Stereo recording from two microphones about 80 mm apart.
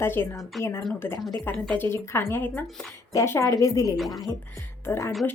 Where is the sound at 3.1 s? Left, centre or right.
Left.